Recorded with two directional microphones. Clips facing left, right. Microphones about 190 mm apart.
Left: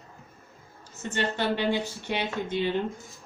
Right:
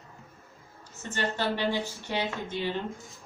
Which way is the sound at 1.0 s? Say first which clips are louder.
Left 2 dB; 15° left (ahead or behind).